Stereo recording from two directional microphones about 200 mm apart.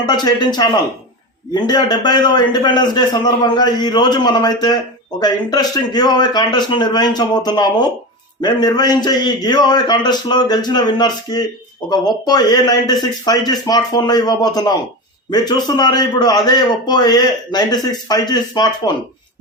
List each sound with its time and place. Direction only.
0.0 s a man's voice: 20° left (ahead or behind)